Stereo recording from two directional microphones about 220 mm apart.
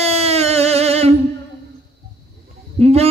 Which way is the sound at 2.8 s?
30° right (ahead or behind).